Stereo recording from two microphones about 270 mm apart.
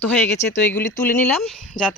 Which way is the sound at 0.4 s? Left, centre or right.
Left.